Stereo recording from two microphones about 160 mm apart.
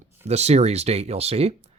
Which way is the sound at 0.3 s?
45° right (ahead or behind).